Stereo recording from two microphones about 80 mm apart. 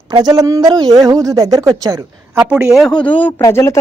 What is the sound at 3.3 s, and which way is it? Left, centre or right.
Speech, left.